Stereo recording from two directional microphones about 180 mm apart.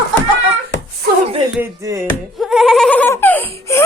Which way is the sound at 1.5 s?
15° right (ahead or behind).